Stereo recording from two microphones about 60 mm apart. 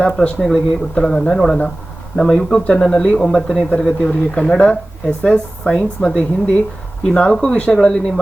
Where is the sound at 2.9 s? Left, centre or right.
Centre.